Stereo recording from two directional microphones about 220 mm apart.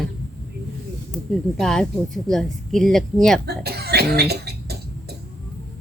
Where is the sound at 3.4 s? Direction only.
45° right (ahead or behind).